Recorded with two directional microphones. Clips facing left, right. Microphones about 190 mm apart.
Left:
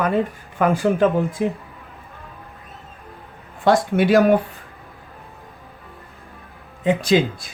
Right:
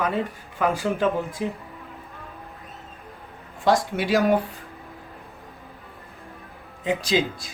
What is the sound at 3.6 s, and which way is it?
Speech, 55° left (ahead or behind).